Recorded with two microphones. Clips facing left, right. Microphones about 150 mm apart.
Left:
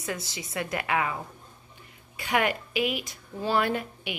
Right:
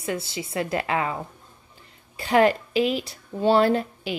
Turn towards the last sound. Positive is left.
turn(degrees=-35)  # may be behind; listen again after turning